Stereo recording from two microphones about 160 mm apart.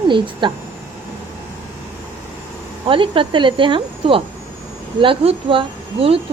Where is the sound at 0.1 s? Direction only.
30° right (ahead or behind).